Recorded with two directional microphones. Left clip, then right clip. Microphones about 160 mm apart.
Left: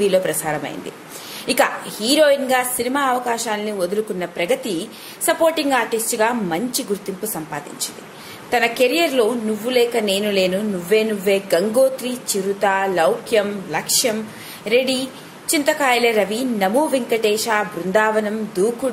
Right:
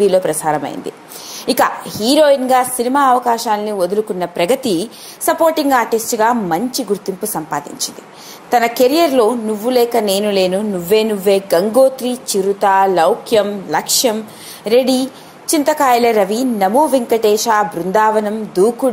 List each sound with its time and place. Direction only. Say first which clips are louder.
0.0 s a woman's voice: right 5 dB; 30° right (ahead or behind)
4.4 s a woman's voice: right 6 dB; 40° right (ahead or behind)
8.5 s a woman's voice: right 5 dB; 35° right (ahead or behind)